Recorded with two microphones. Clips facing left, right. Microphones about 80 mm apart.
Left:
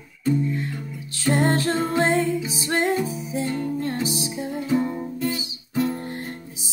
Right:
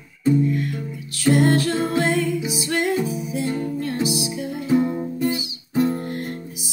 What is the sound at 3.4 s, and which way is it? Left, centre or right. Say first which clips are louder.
Music: right 1 dB; centre.